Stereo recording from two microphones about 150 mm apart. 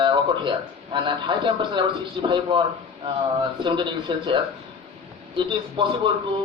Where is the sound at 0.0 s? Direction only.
30° right (ahead or behind).